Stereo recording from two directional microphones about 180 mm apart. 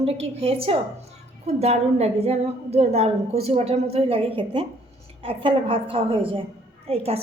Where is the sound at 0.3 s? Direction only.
30° right (ahead or behind).